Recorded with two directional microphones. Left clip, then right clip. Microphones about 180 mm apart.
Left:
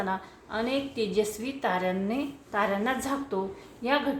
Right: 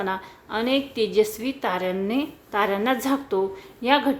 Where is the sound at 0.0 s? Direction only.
35° right (ahead or behind).